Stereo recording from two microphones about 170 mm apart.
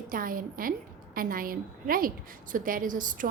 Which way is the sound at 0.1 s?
55° right (ahead or behind).